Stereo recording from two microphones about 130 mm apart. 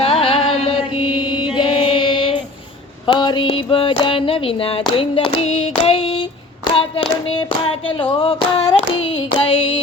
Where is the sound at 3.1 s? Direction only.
35° left (ahead or behind).